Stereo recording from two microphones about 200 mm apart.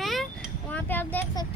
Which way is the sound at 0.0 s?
Centre (ahead or behind).